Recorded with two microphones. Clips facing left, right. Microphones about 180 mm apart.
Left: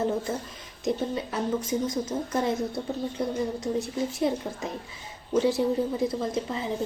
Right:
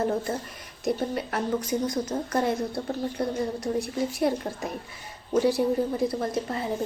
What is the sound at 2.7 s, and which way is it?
Speech, 20° left (ahead or behind).